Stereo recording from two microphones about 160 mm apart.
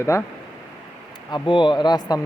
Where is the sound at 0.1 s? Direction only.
20° left (ahead or behind).